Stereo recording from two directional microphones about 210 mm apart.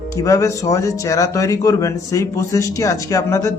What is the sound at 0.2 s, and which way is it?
Speech, 15° left (ahead or behind).